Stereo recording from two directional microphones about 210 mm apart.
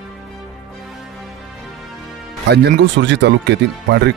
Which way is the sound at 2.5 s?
55° right (ahead or behind).